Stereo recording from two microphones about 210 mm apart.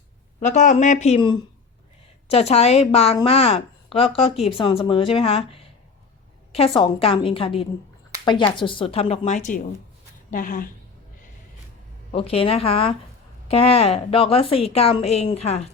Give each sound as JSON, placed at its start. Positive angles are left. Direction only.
{"t": 0.3, "sound": "speech", "side_deg": 35}
{"t": 12.1, "sound": "speech", "side_deg": 25}